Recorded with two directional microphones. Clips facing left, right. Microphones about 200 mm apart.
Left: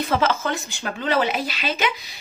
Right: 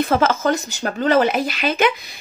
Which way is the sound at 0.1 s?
45° right (ahead or behind).